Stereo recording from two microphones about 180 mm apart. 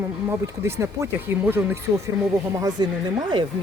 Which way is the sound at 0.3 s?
15° right (ahead or behind).